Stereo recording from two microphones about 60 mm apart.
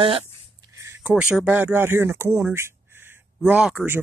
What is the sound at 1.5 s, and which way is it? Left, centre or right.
Speech, right.